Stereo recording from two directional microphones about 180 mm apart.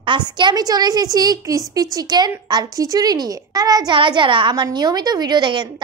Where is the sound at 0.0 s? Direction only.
25° right (ahead or behind).